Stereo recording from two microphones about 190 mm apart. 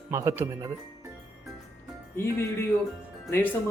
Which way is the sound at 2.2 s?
15° left (ahead or behind).